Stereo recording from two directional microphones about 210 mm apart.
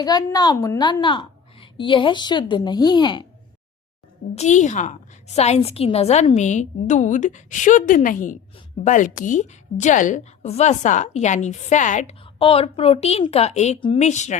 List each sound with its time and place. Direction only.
0.0 s a woman's voice: 20° left (ahead or behind)
4.4 s a woman's voice: 35° left (ahead or behind)